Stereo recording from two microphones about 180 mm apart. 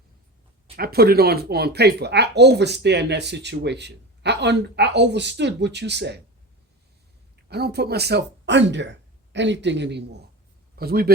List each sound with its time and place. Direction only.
0.8 s speech: 60° right (ahead or behind)
7.5 s speech: 65° right (ahead or behind)
10.8 s a man's voice: 55° right (ahead or behind)